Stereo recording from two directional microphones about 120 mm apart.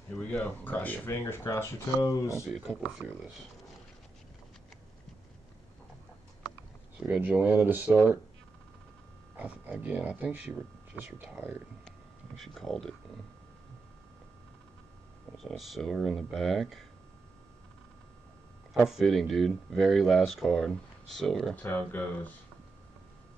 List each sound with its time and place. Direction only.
0.1 s speech: 10° left (ahead or behind)
2.4 s speech: 5° right (ahead or behind)
7.0 s speech: 15° right (ahead or behind)
9.4 s speech: 15° right (ahead or behind)
12.4 s speech: centre (ahead or behind)
15.3 s speech: centre (ahead or behind)
18.7 s speech: centre (ahead or behind)
21.6 s speech: 15° left (ahead or behind)